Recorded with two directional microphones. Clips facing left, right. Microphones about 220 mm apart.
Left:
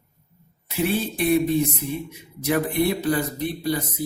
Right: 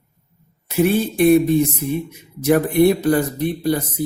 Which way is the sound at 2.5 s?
50° right (ahead or behind).